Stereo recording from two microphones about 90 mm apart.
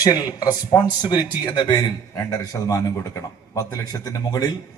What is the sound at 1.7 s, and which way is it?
A man's voice, 40° left (ahead or behind).